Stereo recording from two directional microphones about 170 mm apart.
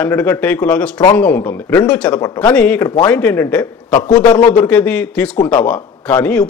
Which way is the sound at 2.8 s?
25° left (ahead or behind).